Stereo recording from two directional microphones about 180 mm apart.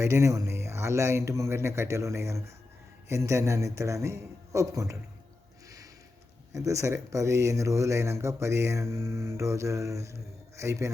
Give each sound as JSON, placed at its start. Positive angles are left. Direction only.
{"t": 0.0, "sound": "speech", "side_deg": -15}
{"t": 6.5, "sound": "speech", "side_deg": -15}